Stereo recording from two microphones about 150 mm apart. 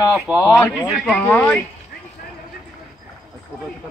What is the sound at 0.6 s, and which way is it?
Speech, 5° left (ahead or behind).